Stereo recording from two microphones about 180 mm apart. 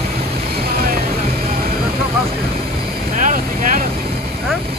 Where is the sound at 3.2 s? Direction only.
50° right (ahead or behind).